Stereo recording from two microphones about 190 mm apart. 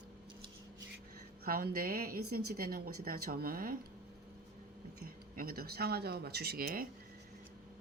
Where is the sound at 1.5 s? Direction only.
50° right (ahead or behind).